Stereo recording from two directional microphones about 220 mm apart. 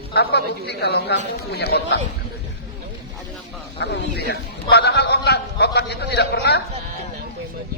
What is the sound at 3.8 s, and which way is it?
A man's voice, 50° left (ahead or behind).